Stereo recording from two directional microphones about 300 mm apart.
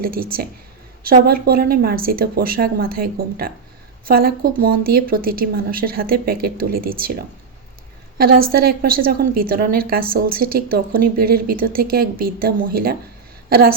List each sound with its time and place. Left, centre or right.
0.0 s a woman's voice: right